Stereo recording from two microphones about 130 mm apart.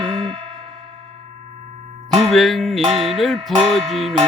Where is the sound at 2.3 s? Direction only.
Centre (ahead or behind).